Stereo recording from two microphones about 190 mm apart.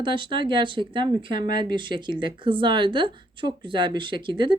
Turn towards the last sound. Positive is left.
turn(degrees=-25)  # may be behind; listen again after turning